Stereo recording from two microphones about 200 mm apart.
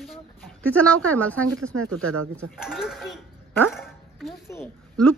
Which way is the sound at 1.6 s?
90° right.